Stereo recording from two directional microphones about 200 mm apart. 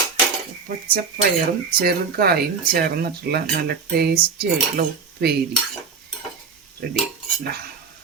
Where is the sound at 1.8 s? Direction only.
50° right (ahead or behind).